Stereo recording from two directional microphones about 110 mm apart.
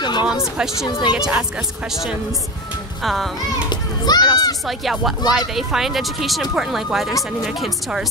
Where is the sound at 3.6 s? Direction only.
40° left (ahead or behind).